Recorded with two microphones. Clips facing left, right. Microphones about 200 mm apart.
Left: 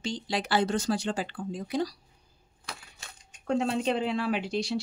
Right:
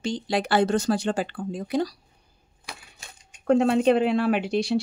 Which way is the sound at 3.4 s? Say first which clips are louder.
Right 8 dB; 60° right (ahead or behind).